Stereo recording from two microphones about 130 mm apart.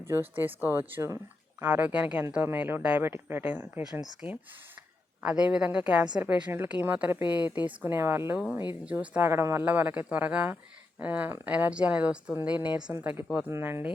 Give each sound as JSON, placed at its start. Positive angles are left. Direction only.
{"t": 0.0, "sound": "speech", "side_deg": -15}